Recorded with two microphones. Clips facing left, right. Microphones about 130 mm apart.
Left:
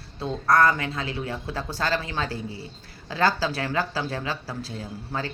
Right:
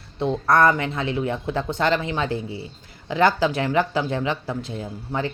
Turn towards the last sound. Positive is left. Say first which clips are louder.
# right 4 dB
turn(degrees=-20)  # may be behind; listen again after turning